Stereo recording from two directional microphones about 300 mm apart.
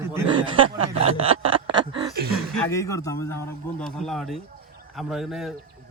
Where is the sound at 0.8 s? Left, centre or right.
Centre.